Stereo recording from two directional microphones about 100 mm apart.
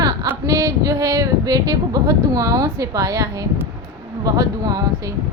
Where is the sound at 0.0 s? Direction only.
40° right (ahead or behind).